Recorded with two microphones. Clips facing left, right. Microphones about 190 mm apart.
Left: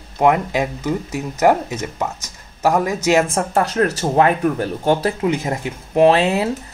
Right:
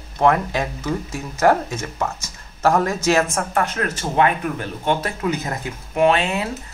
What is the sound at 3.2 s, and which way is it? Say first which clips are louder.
Speech: left 3 dB; 30° left (ahead or behind).